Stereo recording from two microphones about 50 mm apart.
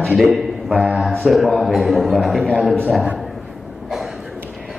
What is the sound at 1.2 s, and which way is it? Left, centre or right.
A man's voice, centre.